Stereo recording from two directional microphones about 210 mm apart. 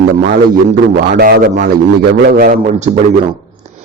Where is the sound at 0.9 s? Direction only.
45° right (ahead or behind).